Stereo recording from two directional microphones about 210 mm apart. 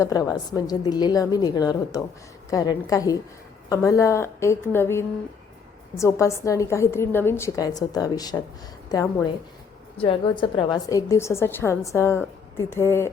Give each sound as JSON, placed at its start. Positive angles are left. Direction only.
{"t": 0.0, "sound": "a woman's voice", "side_deg": 15}